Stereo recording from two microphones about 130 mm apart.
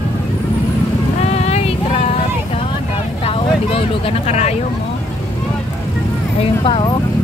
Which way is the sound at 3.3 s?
50° left (ahead or behind).